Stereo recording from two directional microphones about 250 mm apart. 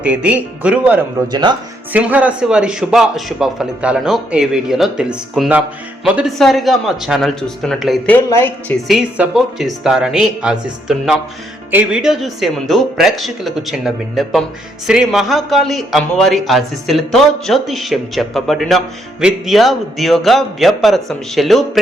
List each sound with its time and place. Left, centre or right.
0.0 s speech: centre
1.3 s speech: centre
1.9 s speech: centre